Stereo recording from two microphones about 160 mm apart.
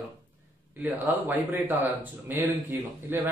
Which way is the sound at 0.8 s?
10° right (ahead or behind).